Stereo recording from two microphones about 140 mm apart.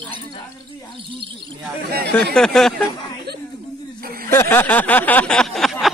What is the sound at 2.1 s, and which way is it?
Speech, 5° left (ahead or behind).